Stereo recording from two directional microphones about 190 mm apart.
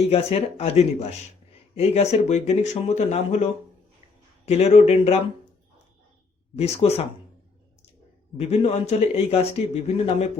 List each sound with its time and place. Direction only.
0.0 s a man's voice: 30° left (ahead or behind)
6.6 s a man's voice: 35° left (ahead or behind)
8.4 s a man's voice: 35° left (ahead or behind)